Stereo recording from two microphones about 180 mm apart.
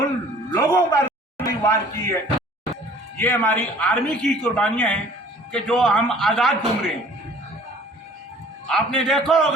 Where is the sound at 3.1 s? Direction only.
10° left (ahead or behind).